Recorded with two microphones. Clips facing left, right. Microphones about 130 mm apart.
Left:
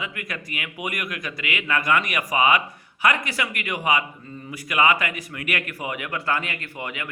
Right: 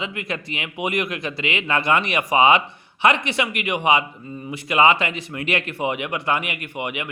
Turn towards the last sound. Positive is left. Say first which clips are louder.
# right 5 dB
turn(degrees=-20)  # may be behind; listen again after turning